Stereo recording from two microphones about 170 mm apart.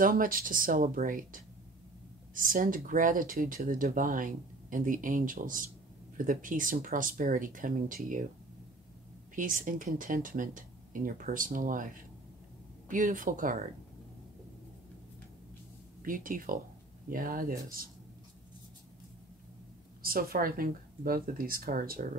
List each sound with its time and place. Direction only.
0.0 s speech: 55° right (ahead or behind)
9.3 s speech: 50° right (ahead or behind)
16.0 s speech: 55° right (ahead or behind)
20.0 s speech: 60° right (ahead or behind)